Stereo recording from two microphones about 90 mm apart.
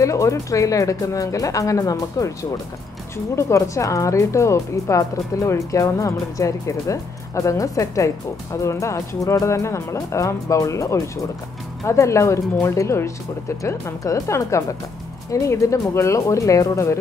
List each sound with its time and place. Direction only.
0.0 s speech: 35° left (ahead or behind)
3.3 s speech: 35° left (ahead or behind)